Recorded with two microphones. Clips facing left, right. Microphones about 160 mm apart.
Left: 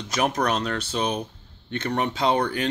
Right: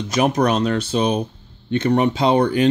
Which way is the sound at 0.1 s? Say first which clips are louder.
Right 6 dB; 15° right (ahead or behind).